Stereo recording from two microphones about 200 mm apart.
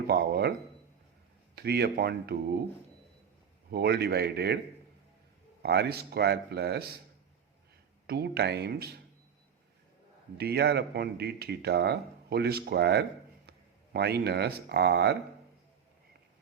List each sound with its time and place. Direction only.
0.1 s speech: 55° right (ahead or behind)
1.5 s speech: 50° right (ahead or behind)
3.7 s speech: 55° right (ahead or behind)
5.6 s speech: 55° right (ahead or behind)
8.0 s speech: 55° right (ahead or behind)
10.3 s speech: 55° right (ahead or behind)